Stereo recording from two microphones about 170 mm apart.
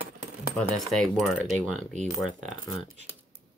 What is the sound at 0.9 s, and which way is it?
Speech, centre (ahead or behind).